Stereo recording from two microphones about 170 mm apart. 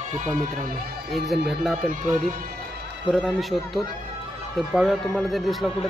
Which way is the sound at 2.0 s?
50° right (ahead or behind).